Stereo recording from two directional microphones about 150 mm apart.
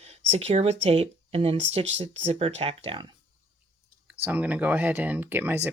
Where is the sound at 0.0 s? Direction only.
45° right (ahead or behind).